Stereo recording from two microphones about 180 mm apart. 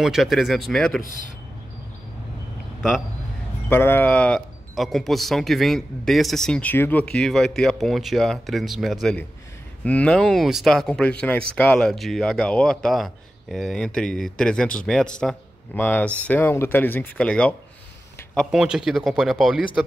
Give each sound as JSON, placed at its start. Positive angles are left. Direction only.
{"t": 0.0, "sound": "speech", "side_deg": 0}
{"t": 1.0, "sound": "a man's voice", "side_deg": 45}
{"t": 3.6, "sound": "speech", "side_deg": 10}